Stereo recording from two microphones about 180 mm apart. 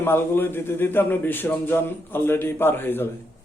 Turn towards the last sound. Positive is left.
turn(degrees=10)  # may be behind; listen again after turning